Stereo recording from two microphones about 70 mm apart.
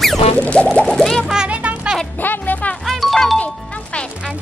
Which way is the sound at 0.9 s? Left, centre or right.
Centre.